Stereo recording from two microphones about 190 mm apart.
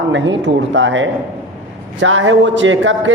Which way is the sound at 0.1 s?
70° right (ahead or behind).